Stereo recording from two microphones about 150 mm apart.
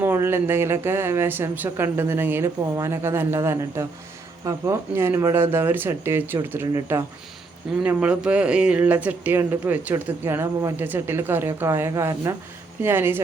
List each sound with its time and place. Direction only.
0.0 s speech: 15° right (ahead or behind)